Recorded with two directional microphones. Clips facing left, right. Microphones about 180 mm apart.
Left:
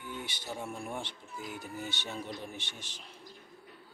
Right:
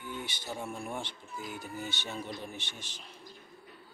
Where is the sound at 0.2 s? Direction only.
10° left (ahead or behind).